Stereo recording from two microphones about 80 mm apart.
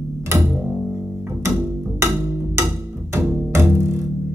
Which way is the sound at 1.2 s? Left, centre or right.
Right.